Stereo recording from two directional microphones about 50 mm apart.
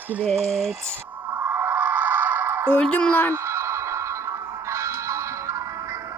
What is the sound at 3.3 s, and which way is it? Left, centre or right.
Music, right.